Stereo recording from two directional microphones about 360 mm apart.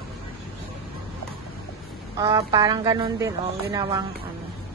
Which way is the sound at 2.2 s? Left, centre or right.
Centre.